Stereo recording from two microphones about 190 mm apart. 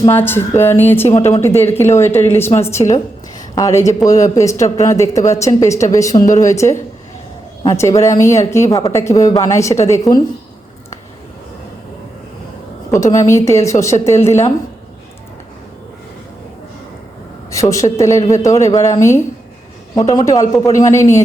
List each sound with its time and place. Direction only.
0.0 s speech: 10° left (ahead or behind)
13.0 s speech: 15° left (ahead or behind)
17.5 s a woman's voice: 15° left (ahead or behind)